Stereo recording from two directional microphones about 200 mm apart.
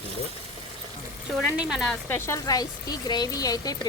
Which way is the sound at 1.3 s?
5° right (ahead or behind).